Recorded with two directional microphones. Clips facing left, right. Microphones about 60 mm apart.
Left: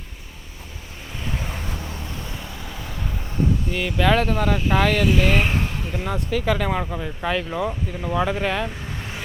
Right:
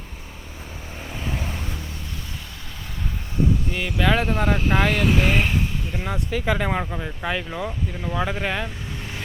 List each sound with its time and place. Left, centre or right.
3.7 s speech: centre
4.3 s speech: right
4.7 s speech: centre
6.9 s speech: centre
7.6 s speech: centre
8.2 s speech: centre